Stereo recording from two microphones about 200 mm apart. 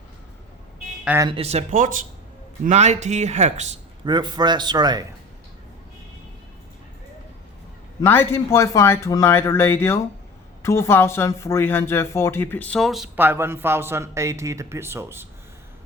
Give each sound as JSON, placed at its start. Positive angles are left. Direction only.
{"t": 1.0, "sound": "speech", "side_deg": -10}
{"t": 1.3, "sound": "speech", "side_deg": -30}
{"t": 4.0, "sound": "a man's voice", "side_deg": -20}
{"t": 8.0, "sound": "speech", "side_deg": 10}